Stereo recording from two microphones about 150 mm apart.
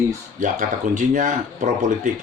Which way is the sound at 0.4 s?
60° right (ahead or behind).